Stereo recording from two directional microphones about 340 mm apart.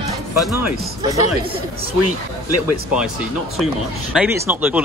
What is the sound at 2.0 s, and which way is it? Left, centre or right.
Speech, left.